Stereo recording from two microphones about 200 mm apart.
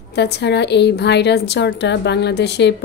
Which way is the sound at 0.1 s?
55° left (ahead or behind).